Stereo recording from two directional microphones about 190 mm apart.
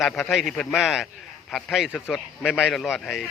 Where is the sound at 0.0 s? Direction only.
Centre (ahead or behind).